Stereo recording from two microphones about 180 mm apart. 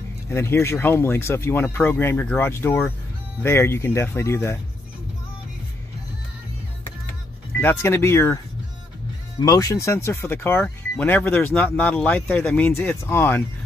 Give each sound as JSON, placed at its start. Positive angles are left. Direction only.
{"t": 0.3, "sound": "speech", "side_deg": 15}
{"t": 7.6, "sound": "speech", "side_deg": 15}
{"t": 9.4, "sound": "speech", "side_deg": 20}